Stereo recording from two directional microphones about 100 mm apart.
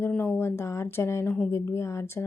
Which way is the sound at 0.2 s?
25° left (ahead or behind).